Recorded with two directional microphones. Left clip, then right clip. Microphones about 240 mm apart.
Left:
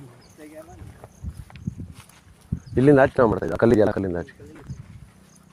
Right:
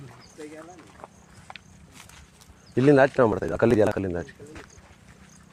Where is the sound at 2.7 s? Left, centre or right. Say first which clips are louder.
Left 2 dB; left.